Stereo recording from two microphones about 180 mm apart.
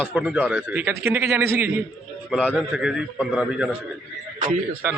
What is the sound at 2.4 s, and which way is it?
Speech, 10° left (ahead or behind).